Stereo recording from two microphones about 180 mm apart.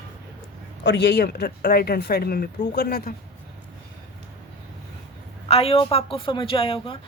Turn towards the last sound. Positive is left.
turn(degrees=30)  # may be behind; listen again after turning